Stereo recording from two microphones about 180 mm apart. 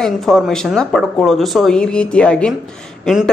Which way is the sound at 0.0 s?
Centre (ahead or behind).